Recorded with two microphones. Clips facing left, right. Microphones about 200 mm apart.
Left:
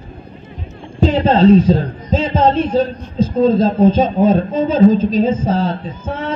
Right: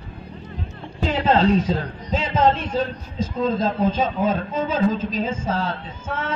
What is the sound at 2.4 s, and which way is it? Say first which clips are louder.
Speech: left 4 dB; 40° left (ahead or behind).